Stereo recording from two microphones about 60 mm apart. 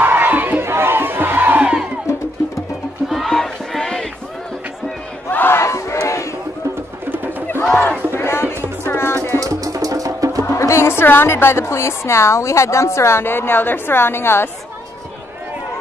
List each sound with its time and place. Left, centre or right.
0.0 s crowd: right
2.1 s music: left
3.1 s battle cry: centre
5.3 s battle cry: left
5.6 s battle cry: left
8.1 s music: left
9.4 s music: right
10.5 s speech: left
13.3 s a woman's voice: left